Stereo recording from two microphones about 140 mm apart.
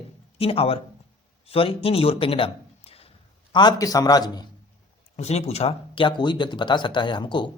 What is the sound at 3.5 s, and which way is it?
Speech, 30° left (ahead or behind).